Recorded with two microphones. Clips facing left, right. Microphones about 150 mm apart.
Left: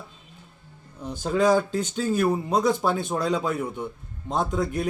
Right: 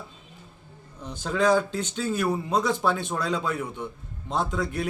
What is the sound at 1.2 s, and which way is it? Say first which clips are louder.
A man's voice: left 2 dB; 10° left (ahead or behind).